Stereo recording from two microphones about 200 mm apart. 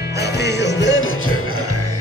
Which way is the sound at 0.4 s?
60° left (ahead or behind).